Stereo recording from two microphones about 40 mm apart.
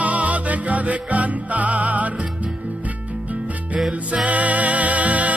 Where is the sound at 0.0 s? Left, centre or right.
Right.